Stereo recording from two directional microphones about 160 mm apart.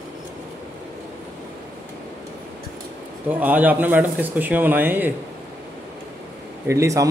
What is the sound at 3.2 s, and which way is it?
Speech, 10° right (ahead or behind).